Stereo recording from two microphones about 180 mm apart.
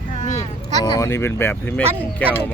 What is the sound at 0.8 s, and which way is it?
Speech, 20° left (ahead or behind).